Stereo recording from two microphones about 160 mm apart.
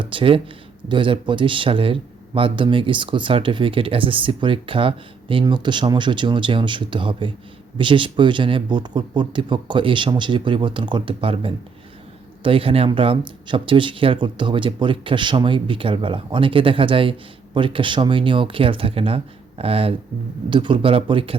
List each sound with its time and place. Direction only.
0.0 s speech: 35° right (ahead or behind)